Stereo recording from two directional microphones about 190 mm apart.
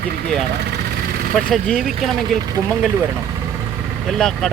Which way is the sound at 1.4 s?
5° left (ahead or behind).